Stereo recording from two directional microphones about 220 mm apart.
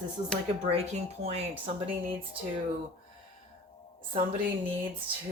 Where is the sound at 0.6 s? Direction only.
25° right (ahead or behind).